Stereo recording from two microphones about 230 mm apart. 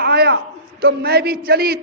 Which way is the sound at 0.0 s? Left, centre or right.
Right.